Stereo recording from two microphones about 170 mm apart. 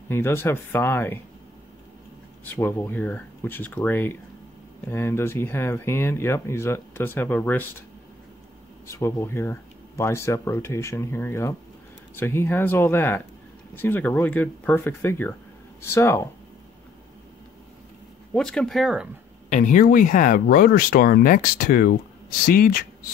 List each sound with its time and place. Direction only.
0.1 s speech: 15° left (ahead or behind)
2.4 s speech: 10° left (ahead or behind)
8.8 s speech: 15° left (ahead or behind)
18.3 s speech: 5° left (ahead or behind)
19.5 s speech: 50° left (ahead or behind)